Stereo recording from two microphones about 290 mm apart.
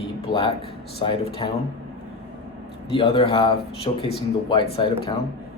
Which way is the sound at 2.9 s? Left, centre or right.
Centre.